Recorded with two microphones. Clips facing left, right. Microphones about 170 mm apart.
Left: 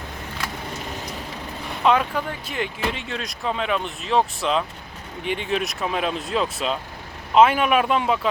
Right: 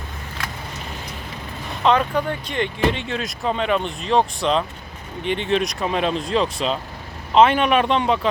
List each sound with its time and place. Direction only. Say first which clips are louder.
1.8 s speech: right 2 dB; 5° left (ahead or behind)